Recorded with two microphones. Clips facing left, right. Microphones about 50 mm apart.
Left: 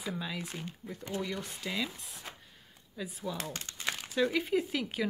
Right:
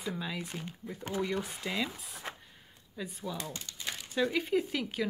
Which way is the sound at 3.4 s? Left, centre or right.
Left.